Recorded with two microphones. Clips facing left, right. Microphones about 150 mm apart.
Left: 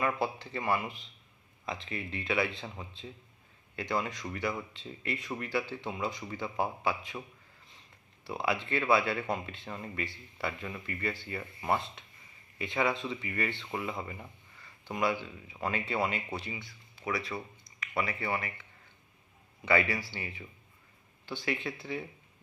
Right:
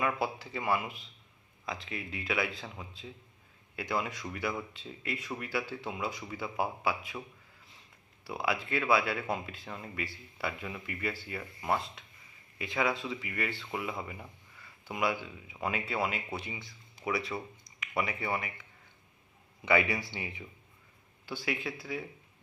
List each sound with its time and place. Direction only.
0.0 s speech: 5° right (ahead or behind)
19.6 s speech: 15° right (ahead or behind)
21.3 s speech: 5° right (ahead or behind)